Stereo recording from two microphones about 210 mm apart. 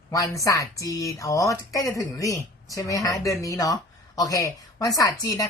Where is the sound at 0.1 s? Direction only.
15° left (ahead or behind).